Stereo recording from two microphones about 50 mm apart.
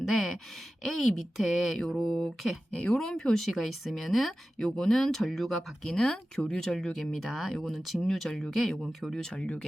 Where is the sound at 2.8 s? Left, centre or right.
Centre.